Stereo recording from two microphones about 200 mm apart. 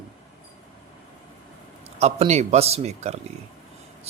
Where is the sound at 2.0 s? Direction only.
30° right (ahead or behind).